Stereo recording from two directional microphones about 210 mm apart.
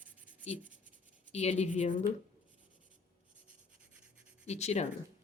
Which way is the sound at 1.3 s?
30° left (ahead or behind).